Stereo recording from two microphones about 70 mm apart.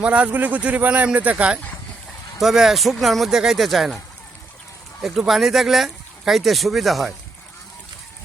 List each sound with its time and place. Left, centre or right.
0.0 s speech: centre
2.4 s speech: centre